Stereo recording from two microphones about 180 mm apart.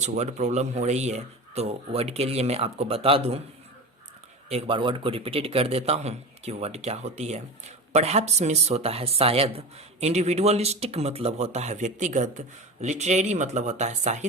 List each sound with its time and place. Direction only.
0.0 s speech: 40° right (ahead or behind)
4.4 s speech: 35° right (ahead or behind)